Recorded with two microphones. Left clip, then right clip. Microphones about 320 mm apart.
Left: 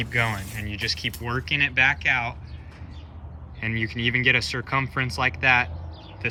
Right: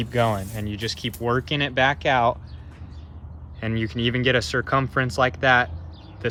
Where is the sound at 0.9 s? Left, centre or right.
Right.